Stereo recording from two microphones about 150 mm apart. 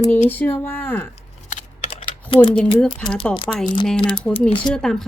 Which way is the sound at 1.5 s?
55° left (ahead or behind).